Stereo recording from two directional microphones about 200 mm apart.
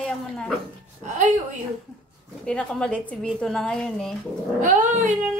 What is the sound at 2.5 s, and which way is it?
A woman's voice, 5° left (ahead or behind).